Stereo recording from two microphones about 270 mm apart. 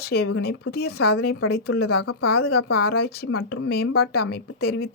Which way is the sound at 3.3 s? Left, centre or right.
Left.